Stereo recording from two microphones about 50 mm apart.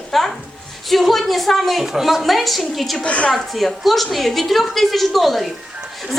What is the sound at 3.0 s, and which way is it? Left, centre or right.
Speech, left.